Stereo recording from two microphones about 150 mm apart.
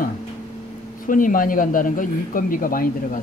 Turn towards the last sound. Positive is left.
turn(degrees=70)  # may be behind; listen again after turning